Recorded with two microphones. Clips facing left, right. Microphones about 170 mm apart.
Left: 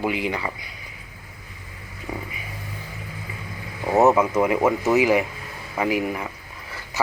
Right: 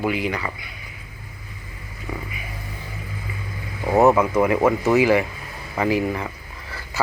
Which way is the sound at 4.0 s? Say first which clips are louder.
Right 1 dB; 20° left (ahead or behind).